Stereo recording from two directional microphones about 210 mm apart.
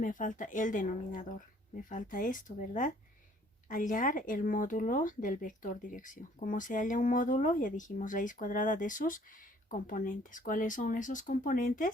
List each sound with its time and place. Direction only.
0.0 s speech: 40° left (ahead or behind)